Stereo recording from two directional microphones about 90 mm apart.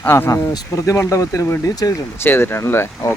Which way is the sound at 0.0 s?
25° left (ahead or behind).